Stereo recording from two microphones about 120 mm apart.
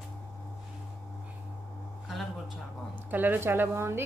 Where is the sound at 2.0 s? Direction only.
Centre (ahead or behind).